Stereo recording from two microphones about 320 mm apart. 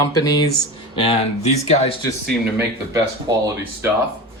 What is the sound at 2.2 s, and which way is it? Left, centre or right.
Speech, centre.